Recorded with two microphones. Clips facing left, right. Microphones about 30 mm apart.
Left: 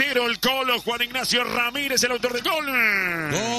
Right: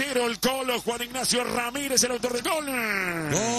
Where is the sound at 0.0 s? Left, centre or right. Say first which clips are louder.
Left 4 dB; left.